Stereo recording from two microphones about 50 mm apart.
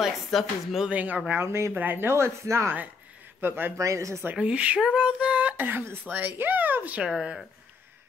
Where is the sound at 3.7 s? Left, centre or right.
Right.